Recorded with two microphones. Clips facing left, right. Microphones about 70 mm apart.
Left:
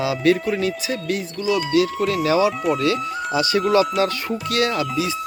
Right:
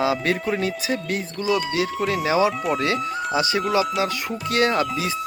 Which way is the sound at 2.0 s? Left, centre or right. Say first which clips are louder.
Left 2 dB; centre.